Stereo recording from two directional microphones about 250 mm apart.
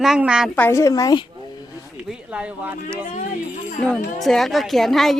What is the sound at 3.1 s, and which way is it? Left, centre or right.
Speech, left.